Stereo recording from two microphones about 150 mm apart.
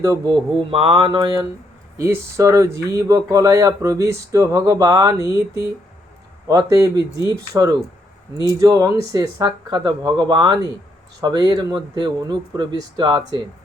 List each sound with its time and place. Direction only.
0.0 s speech: 20° right (ahead or behind)
0.5 s mantra: 40° right (ahead or behind)
2.0 s speech: 20° right (ahead or behind)